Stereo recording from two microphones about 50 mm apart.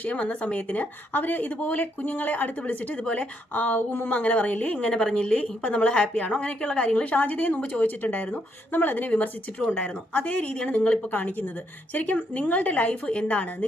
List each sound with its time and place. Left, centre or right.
0.0 s a woman's voice: left
3.5 s a woman's voice: left